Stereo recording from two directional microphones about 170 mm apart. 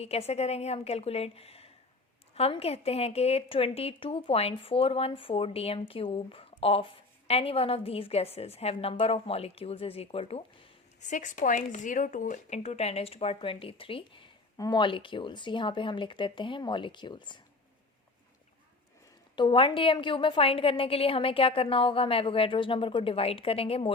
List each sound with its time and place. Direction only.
0.0 s a woman's voice: 35° left (ahead or behind)
11.0 s speech: 45° left (ahead or behind); by 17.4 s 25° left (ahead or behind)
19.4 s a woman's voice: 30° left (ahead or behind)